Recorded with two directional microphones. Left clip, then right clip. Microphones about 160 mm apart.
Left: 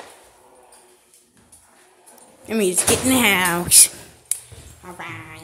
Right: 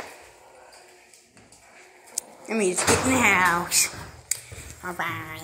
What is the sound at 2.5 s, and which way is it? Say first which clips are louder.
Speech: left 4 dB; 60° left (ahead or behind).